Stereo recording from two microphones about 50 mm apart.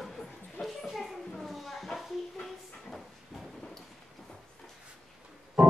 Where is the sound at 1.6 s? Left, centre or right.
Centre.